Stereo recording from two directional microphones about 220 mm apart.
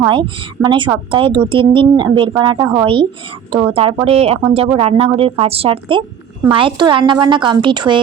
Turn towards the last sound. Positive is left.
turn(degrees=-20)  # may be behind; listen again after turning